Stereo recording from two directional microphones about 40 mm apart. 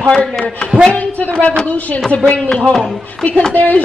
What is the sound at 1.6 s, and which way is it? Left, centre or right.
Speech, left.